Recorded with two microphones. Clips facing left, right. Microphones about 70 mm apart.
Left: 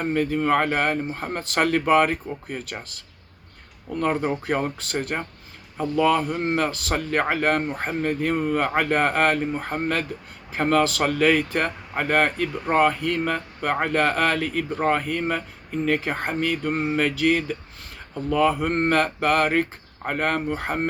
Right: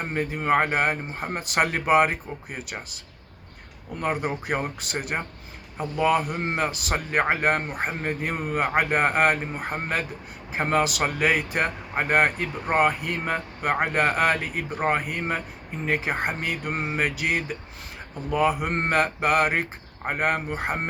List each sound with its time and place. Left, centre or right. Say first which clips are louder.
0.0 s speech: left 5 dB; right
4.0 s speech: left 3 dB; centre